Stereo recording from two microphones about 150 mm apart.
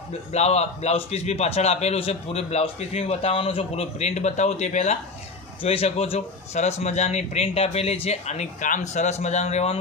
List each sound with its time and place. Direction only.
0.3 s a man's voice: 45° left (ahead or behind)